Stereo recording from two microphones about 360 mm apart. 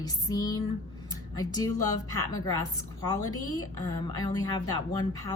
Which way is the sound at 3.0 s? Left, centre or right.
Left.